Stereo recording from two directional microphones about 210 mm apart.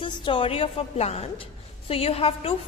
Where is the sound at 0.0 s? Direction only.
25° left (ahead or behind).